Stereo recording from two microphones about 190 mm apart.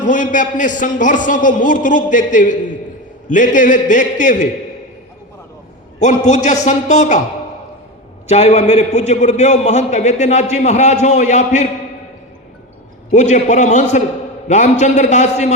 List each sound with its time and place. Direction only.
0.0 s a man's voice: 45° left (ahead or behind)
6.0 s a man's voice: 40° left (ahead or behind)
8.3 s a man's voice: 35° left (ahead or behind)
13.1 s a man's voice: 40° left (ahead or behind)